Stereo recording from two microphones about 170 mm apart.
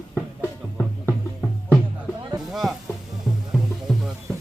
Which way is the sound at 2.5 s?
Centre (ahead or behind).